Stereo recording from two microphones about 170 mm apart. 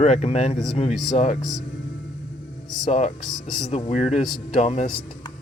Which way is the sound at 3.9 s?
40° left (ahead or behind).